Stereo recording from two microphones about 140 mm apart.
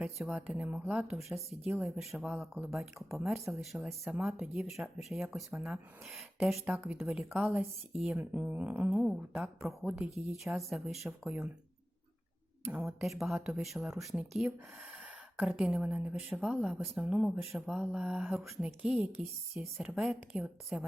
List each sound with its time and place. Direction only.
0.2 s speech: centre (ahead or behind)
7.6 s speech: centre (ahead or behind)
12.6 s speech: 15° right (ahead or behind)
13.0 s speech: centre (ahead or behind)